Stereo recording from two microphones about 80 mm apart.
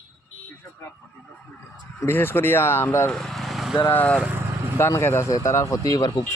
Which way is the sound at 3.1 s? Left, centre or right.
Centre.